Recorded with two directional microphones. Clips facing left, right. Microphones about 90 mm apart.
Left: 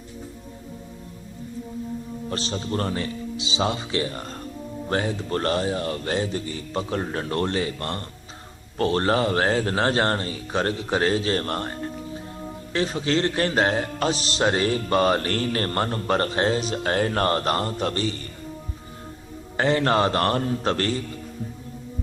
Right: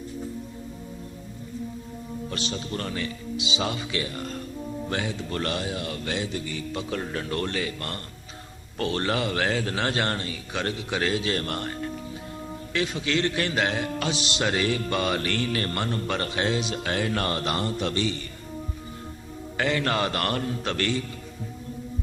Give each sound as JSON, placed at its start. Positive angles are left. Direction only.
{"t": 2.3, "sound": "a man's voice", "side_deg": 35}
{"t": 19.5, "sound": "a man's voice", "side_deg": 35}